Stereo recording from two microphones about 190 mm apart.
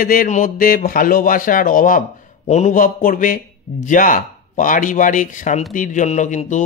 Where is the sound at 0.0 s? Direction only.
50° left (ahead or behind).